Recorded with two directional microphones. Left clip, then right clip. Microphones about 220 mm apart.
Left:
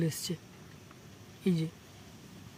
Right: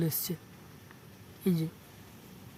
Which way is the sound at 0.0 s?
10° right (ahead or behind).